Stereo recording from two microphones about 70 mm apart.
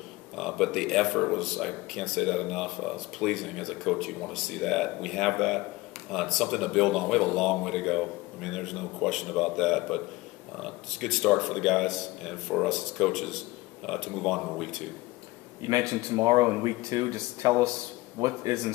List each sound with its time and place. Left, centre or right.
0.4 s speech: centre
15.9 s speech: right